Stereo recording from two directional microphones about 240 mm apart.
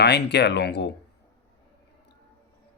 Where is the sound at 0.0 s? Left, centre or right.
Left.